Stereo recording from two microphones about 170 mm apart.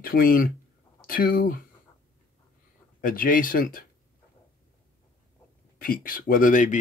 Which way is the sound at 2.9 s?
55° left (ahead or behind).